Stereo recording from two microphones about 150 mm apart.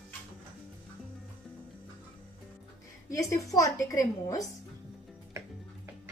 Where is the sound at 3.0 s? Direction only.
20° left (ahead or behind).